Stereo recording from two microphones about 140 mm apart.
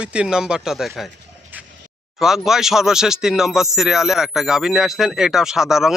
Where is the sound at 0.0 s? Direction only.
10° right (ahead or behind).